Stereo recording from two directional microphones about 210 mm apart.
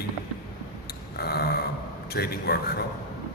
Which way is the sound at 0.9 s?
50° left (ahead or behind).